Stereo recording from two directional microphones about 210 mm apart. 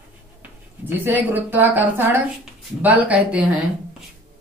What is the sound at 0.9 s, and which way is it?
A woman's voice, 10° right (ahead or behind).